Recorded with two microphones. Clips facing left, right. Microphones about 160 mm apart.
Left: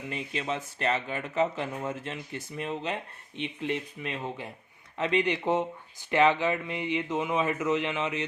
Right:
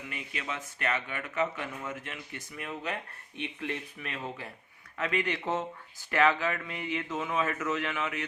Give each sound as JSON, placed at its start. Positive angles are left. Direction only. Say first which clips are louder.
{"t": 0.1, "sound": "speech", "louder": "left 7 dB", "side_deg": 30}